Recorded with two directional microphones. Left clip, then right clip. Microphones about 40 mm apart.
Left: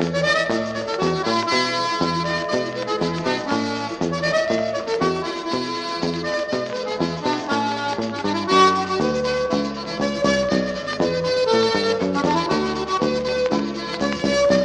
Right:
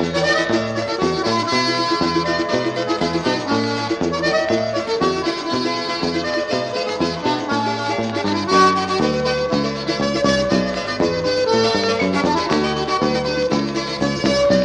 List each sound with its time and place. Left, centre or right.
1.3 s music: left
8.5 s music: left
11.7 s music: left